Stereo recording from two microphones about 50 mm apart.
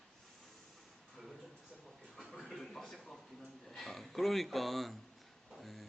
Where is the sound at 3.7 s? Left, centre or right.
Centre.